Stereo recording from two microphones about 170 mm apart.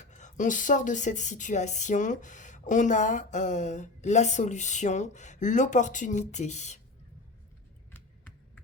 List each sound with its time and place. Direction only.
0.0 s speech: 45° left (ahead or behind)